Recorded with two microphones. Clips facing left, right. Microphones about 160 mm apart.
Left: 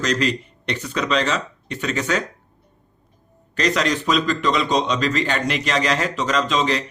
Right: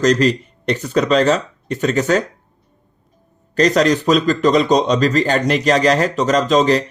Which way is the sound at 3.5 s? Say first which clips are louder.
Right 7 dB; 40° right (ahead or behind).